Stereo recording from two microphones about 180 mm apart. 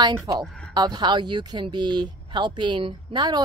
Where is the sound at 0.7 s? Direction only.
25° right (ahead or behind).